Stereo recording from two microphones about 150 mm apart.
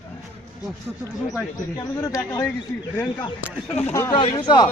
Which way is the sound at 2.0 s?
20° left (ahead or behind).